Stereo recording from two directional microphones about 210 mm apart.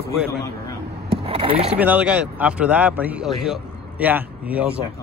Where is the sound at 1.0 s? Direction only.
25° right (ahead or behind).